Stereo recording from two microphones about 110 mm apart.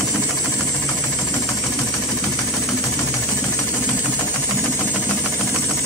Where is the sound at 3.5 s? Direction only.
15° left (ahead or behind).